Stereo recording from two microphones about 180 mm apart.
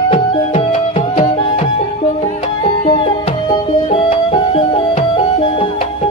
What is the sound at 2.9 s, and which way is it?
Music, 30° left (ahead or behind).